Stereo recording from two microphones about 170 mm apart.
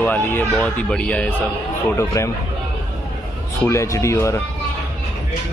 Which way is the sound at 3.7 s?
15° left (ahead or behind).